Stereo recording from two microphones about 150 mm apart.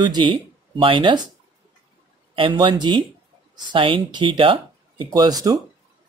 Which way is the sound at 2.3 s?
35° right (ahead or behind).